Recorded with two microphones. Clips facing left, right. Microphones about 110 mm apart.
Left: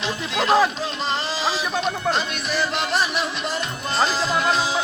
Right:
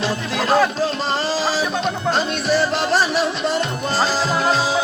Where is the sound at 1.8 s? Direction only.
35° right (ahead or behind).